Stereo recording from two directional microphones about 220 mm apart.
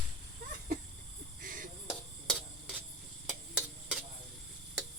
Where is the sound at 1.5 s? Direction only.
40° right (ahead or behind).